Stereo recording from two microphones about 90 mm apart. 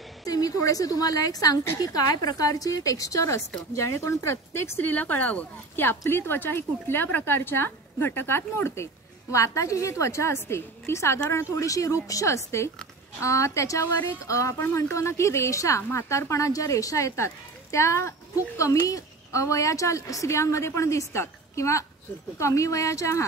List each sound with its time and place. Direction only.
0.2 s a woman's voice: 40° left (ahead or behind)